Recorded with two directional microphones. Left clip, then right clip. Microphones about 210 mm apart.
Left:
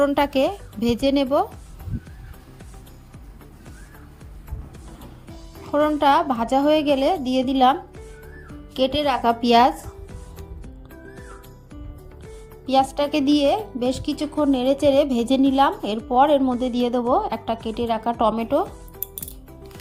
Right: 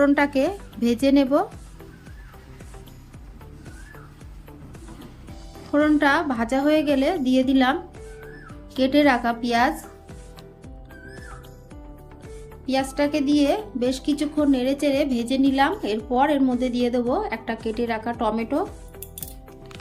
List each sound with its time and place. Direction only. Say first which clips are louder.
0.0 s speech: left 1 dB; 40° left (ahead or behind)
5.7 s speech: left 2 dB; 35° left (ahead or behind)
8.8 s speech: right 1 dB; 40° left (ahead or behind)
12.6 s speech: left 4 dB; 35° left (ahead or behind)